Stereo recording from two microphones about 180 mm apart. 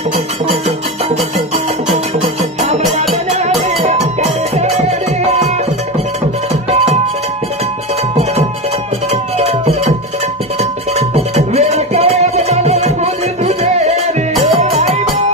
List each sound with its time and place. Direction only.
1.9 s music: 35° right (ahead or behind)
9.1 s music: 35° right (ahead or behind)